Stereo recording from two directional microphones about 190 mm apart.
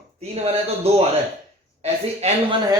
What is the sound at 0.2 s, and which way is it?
A man's voice, 35° right (ahead or behind).